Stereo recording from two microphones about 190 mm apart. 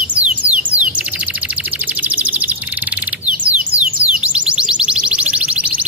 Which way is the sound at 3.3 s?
5° right (ahead or behind).